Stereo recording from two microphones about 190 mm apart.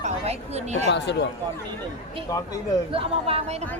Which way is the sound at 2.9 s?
30° right (ahead or behind).